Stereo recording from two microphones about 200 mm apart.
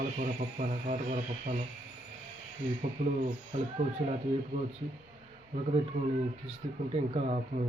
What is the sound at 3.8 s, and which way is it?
Speech, 35° right (ahead or behind).